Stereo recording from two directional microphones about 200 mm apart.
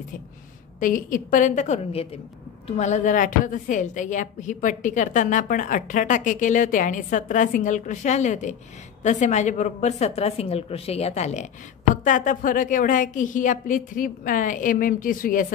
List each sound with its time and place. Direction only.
0.7 s a woman's voice: 40° left (ahead or behind)